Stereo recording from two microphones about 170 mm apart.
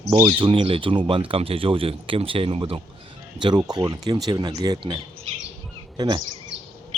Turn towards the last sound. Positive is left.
turn(degrees=-25)  # may be behind; listen again after turning